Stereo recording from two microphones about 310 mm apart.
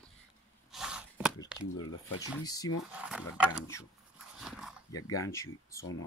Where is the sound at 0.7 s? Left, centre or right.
Centre.